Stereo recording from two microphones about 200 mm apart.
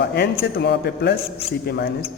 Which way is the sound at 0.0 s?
55° left (ahead or behind).